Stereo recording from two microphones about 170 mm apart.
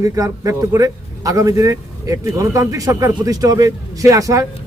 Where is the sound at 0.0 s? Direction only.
20° right (ahead or behind).